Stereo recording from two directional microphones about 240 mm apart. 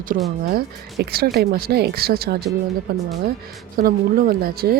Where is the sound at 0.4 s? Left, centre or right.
Right.